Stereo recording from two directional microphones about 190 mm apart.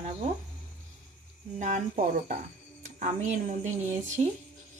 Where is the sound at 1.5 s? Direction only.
40° right (ahead or behind).